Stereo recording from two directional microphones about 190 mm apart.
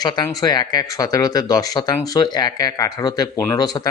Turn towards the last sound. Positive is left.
turn(degrees=20)  # may be behind; listen again after turning